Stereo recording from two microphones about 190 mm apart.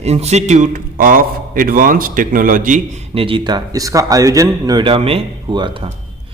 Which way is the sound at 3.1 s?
30° right (ahead or behind).